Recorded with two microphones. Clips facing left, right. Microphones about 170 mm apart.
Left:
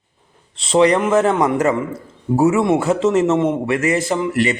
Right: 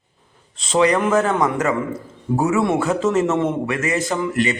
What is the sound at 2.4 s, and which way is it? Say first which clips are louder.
A man's voice: left 4 dB; 25° left (ahead or behind).